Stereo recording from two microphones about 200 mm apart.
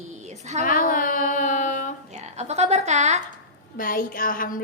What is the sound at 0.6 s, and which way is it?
Child singing, 45° left (ahead or behind).